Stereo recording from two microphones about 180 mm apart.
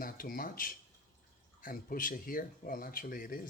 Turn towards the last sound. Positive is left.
turn(degrees=50)  # may be behind; listen again after turning